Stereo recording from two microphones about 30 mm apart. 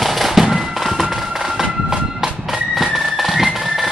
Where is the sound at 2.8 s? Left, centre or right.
Centre.